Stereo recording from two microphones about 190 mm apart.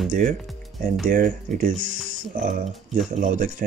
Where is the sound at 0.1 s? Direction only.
45° right (ahead or behind).